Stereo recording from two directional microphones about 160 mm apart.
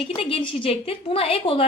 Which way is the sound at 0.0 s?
35° left (ahead or behind).